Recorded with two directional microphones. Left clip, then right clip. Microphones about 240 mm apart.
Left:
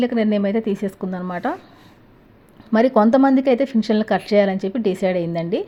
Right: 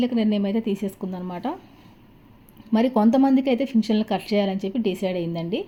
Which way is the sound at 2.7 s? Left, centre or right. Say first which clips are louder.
Left 6 dB; centre.